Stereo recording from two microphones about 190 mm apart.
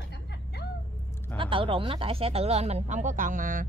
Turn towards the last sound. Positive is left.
turn(degrees=-45)  # may be behind; listen again after turning